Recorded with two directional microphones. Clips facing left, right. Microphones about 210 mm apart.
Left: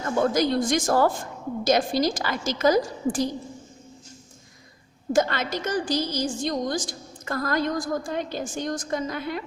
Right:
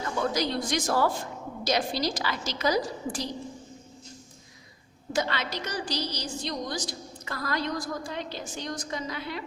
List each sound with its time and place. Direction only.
0.0 s a woman's voice: 50° left (ahead or behind)
5.1 s a woman's voice: 50° left (ahead or behind)